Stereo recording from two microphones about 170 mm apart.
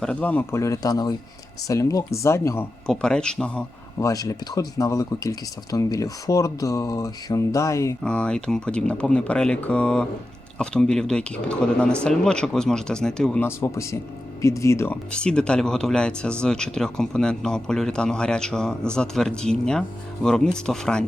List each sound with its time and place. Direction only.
0.0 s speech: 5° left (ahead or behind)
2.8 s speech: 5° left (ahead or behind)
4.0 s speech: 20° left (ahead or behind)
8.0 s speech: 5° left (ahead or behind)
13.6 s speech: 15° left (ahead or behind)